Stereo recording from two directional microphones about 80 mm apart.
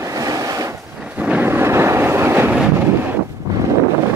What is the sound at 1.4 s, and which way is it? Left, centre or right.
Vehicle, right.